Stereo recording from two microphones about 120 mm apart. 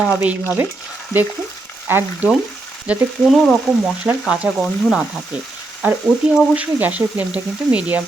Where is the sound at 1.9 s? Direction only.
20° right (ahead or behind).